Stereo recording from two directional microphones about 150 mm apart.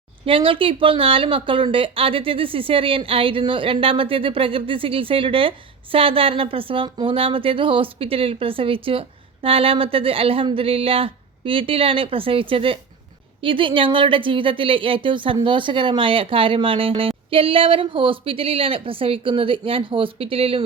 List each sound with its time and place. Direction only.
0.3 s speech: 35° right (ahead or behind)